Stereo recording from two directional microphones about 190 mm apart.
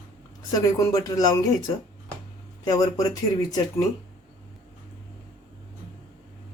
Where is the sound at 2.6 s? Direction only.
20° left (ahead or behind).